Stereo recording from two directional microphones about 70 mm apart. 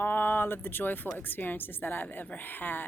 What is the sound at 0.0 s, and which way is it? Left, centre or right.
A woman's voice, left.